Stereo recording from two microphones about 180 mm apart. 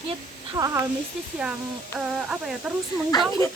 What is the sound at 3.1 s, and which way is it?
Speech, 20° left (ahead or behind).